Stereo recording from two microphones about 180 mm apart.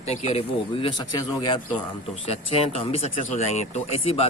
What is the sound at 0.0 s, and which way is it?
Speech, 35° left (ahead or behind).